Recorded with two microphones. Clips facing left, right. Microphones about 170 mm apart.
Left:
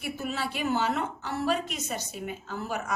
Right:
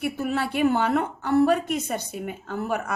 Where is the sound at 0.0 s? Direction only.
55° right (ahead or behind).